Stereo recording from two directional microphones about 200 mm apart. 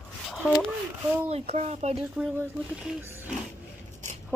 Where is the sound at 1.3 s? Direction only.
30° right (ahead or behind).